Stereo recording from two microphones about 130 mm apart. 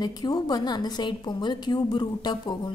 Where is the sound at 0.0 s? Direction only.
30° left (ahead or behind).